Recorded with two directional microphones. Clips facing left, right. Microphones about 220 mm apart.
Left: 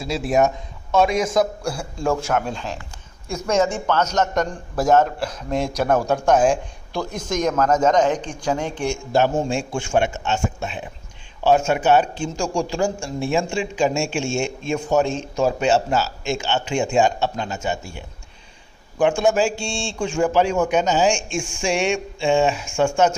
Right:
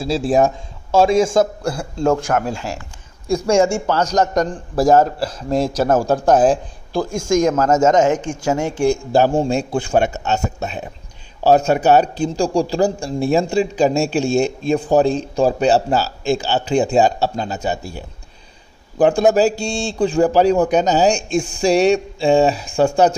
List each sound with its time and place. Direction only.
0.0 s a man's voice: 30° right (ahead or behind)
2.1 s speech: centre (ahead or behind)
3.6 s a man's voice: 30° right (ahead or behind)
7.8 s speech: 45° right (ahead or behind)
8.5 s a woman's voice: 10° right (ahead or behind)
8.8 s a man's voice: 35° right (ahead or behind)